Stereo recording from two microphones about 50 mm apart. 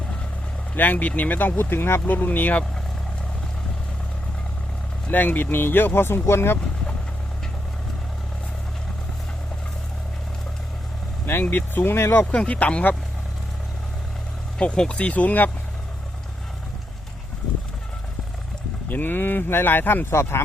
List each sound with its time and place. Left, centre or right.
0.8 s speech: left
2.0 s speech: left
5.0 s speech: left
11.5 s speech: left
12.2 s speech: left
14.6 s speech: left
18.9 s speech: left